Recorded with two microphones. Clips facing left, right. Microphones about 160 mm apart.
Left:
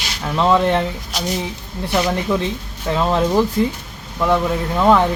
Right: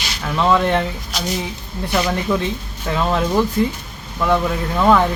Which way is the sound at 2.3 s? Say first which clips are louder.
Even; 20° left (ahead or behind).